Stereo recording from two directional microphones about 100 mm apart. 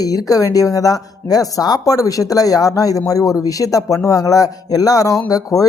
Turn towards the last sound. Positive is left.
turn(degrees=35)  # may be behind; listen again after turning